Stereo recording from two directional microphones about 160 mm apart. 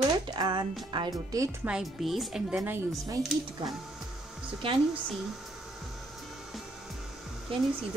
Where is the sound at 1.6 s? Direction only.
5° right (ahead or behind).